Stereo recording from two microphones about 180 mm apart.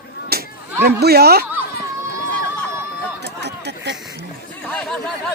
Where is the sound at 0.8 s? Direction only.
60° right (ahead or behind).